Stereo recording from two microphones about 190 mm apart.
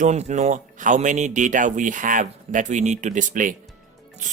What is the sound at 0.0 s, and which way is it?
Speech, 35° right (ahead or behind).